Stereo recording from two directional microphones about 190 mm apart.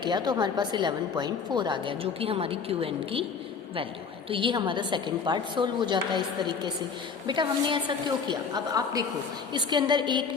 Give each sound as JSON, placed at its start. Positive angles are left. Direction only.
{"t": 0.0, "sound": "a woman's voice", "side_deg": -20}
{"t": 4.3, "sound": "a woman's voice", "side_deg": -25}